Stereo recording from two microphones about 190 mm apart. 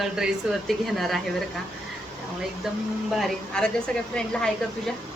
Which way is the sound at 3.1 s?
Centre (ahead or behind).